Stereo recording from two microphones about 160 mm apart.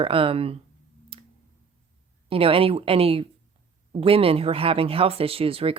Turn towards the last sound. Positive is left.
turn(degrees=-35)  # may be behind; listen again after turning